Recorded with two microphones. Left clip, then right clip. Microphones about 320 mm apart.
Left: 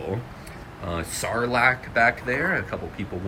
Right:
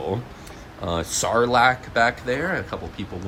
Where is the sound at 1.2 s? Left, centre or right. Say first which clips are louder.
Right 4 dB; centre.